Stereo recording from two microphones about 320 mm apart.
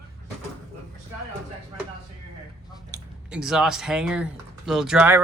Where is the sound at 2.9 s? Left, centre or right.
Centre.